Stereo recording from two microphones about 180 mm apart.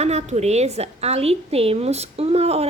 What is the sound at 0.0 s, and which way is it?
A woman's voice, 35° right (ahead or behind).